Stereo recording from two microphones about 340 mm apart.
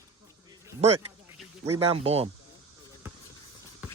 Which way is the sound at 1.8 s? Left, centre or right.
Centre.